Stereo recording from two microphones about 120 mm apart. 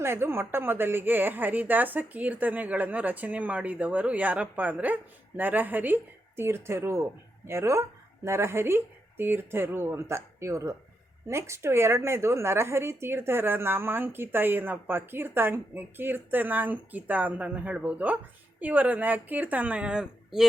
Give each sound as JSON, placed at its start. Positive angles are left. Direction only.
{"t": 0.0, "sound": "a woman's voice", "side_deg": -20}